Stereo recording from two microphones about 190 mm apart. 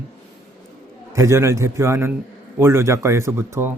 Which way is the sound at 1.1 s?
15° right (ahead or behind).